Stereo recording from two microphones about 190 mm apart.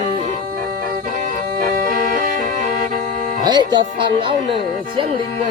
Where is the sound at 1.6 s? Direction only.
45° right (ahead or behind).